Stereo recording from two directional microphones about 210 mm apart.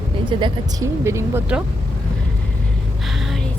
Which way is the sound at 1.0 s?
10° right (ahead or behind).